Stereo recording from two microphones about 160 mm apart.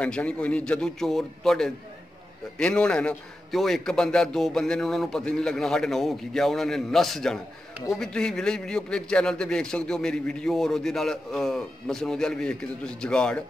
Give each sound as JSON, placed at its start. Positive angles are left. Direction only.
{"t": 0.0, "sound": "a man's voice", "side_deg": 10}